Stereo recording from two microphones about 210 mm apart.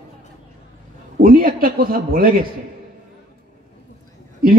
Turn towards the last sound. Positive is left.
turn(degrees=-45)  # may be behind; listen again after turning